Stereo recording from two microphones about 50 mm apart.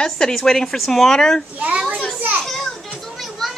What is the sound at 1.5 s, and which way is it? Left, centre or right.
Speech, right.